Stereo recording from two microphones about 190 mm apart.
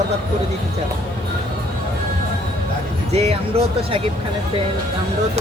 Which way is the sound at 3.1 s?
35° right (ahead or behind).